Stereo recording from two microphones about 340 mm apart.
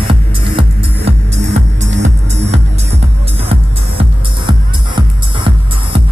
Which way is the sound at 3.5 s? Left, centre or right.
Centre.